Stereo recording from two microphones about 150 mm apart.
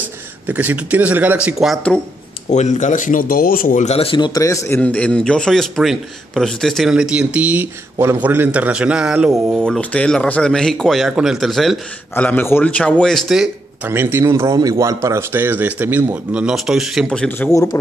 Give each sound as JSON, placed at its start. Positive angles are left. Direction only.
{"t": 0.5, "sound": "speech", "side_deg": -10}
{"t": 1.6, "sound": "a man's voice", "side_deg": 0}
{"t": 2.5, "sound": "speech", "side_deg": 50}
{"t": 3.8, "sound": "speech", "side_deg": 40}
{"t": 4.3, "sound": "a man's voice", "side_deg": 20}
{"t": 9.8, "sound": "a man's voice", "side_deg": 5}
{"t": 12.2, "sound": "a man's voice", "side_deg": 10}
{"t": 13.8, "sound": "speech", "side_deg": -15}
{"t": 17.5, "sound": "a man's voice", "side_deg": 20}